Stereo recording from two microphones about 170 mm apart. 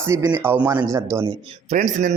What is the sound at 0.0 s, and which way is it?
Speech, 15° right (ahead or behind).